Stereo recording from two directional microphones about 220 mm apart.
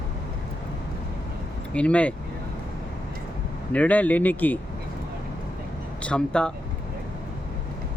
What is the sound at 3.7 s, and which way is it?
Speech, 5° left (ahead or behind).